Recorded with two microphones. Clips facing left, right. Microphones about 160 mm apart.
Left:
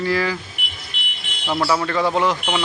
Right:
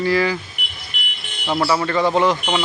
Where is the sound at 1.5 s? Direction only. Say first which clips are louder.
Right 1 dB; 5° right (ahead or behind).